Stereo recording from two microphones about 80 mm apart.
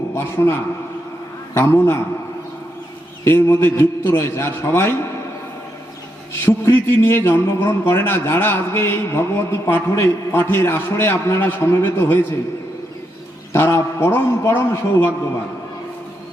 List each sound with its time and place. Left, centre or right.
0.1 s a man's voice: left
3.2 s a man's voice: left
6.4 s a man's voice: left
13.5 s a man's voice: left